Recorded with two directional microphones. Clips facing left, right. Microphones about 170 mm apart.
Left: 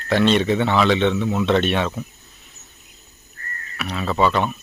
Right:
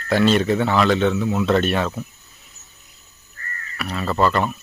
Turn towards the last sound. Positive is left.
turn(degrees=0)  # may be behind; listen again after turning